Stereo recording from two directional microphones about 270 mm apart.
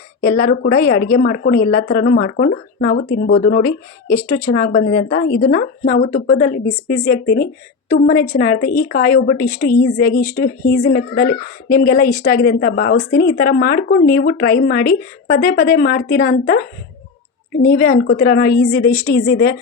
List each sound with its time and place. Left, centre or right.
0.2 s speech: left
17.6 s speech: left